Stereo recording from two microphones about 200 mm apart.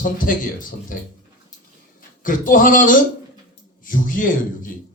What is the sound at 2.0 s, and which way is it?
A man's voice, 45° left (ahead or behind).